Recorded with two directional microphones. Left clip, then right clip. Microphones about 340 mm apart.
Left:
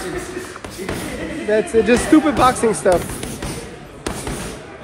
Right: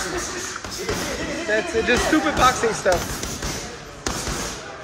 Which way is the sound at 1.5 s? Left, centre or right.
Centre.